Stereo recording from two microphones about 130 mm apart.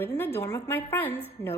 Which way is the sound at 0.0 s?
15° left (ahead or behind).